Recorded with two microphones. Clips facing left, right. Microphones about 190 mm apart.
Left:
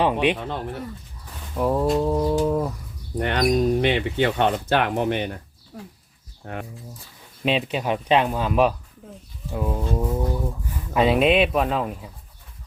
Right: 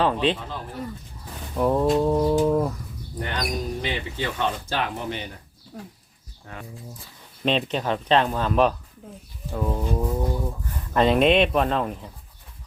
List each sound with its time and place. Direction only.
0.0 s speech: 15° left (ahead or behind)
0.3 s speech: 65° left (ahead or behind)
1.5 s a sound: centre (ahead or behind)
3.2 s speech: 65° left (ahead or behind)
5.7 s speech: centre (ahead or behind)
6.4 s speech: 60° left (ahead or behind)
7.4 s speech: 10° left (ahead or behind)
10.9 s speech: 5° left (ahead or behind)